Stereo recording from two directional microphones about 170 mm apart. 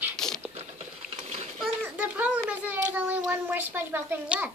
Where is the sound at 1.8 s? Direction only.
10° right (ahead or behind).